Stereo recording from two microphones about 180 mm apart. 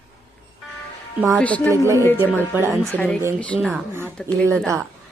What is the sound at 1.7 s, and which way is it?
Speech, 15° right (ahead or behind).